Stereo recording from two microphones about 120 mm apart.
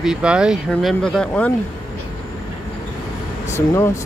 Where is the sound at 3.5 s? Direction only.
20° left (ahead or behind).